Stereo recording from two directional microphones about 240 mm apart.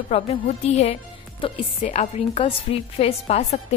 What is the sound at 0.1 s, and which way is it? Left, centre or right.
A woman's voice, left.